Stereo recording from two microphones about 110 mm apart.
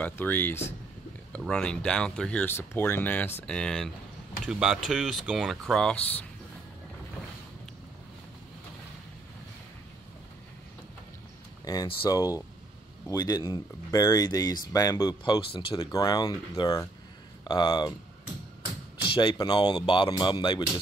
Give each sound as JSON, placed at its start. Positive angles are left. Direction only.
{"t": 0.0, "sound": "speech", "side_deg": 15}
{"t": 1.4, "sound": "speech", "side_deg": 5}
{"t": 4.5, "sound": "speech", "side_deg": -5}
{"t": 11.6, "sound": "speech", "side_deg": 35}
{"t": 19.0, "sound": "speech", "side_deg": 45}